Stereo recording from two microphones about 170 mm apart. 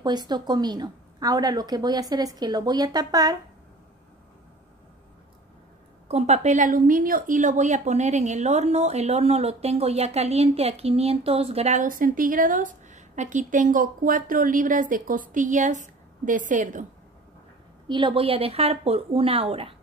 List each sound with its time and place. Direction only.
0.0 s a woman's voice: 25° right (ahead or behind)
6.0 s a woman's voice: 40° right (ahead or behind)
17.8 s a woman's voice: 30° right (ahead or behind)